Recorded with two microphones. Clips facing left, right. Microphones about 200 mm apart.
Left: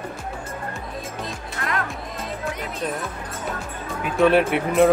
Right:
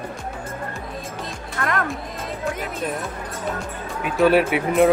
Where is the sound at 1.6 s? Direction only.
50° right (ahead or behind).